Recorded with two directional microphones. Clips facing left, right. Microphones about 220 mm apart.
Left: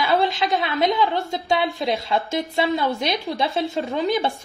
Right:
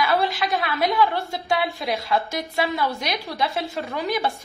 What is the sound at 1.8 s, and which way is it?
Speech, 30° left (ahead or behind).